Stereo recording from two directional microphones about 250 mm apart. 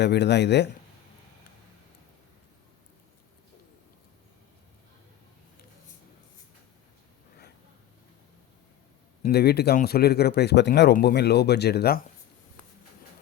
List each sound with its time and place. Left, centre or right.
0.0 s speech: left
9.2 s a man's voice: left